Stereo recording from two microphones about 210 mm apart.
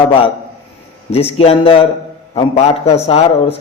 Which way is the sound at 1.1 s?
30° left (ahead or behind).